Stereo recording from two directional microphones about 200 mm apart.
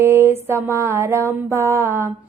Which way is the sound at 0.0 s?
15° right (ahead or behind).